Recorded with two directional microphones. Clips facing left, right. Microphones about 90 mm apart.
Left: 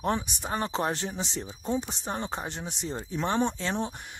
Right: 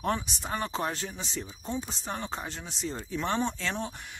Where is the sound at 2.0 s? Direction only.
30° left (ahead or behind).